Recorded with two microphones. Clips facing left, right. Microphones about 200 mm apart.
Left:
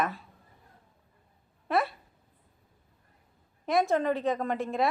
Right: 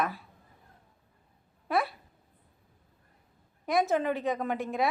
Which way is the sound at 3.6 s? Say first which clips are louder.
Left 1 dB; centre (ahead or behind).